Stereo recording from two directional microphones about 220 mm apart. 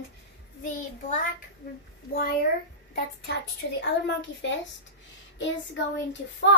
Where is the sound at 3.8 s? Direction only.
55° left (ahead or behind).